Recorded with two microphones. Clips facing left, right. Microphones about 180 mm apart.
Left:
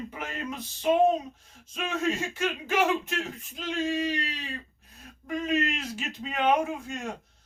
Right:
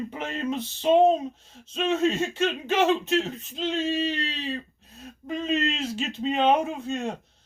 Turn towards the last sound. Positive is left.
turn(degrees=-25)  # may be behind; listen again after turning